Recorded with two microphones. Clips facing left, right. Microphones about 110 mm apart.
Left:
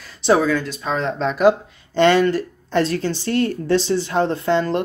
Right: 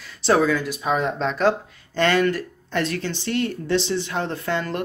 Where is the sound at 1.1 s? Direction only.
5° left (ahead or behind).